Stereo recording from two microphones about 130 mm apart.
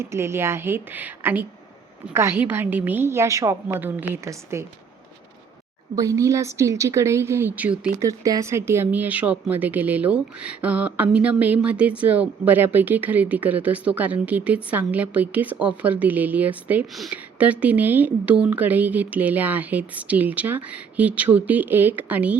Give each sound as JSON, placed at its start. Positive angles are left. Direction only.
{"t": 0.0, "sound": "a woman's voice", "side_deg": -20}
{"t": 6.0, "sound": "a woman's voice", "side_deg": -25}
{"t": 7.9, "sound": "speech", "side_deg": -25}